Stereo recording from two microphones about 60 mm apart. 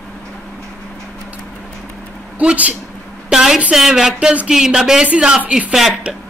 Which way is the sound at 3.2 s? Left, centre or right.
Centre.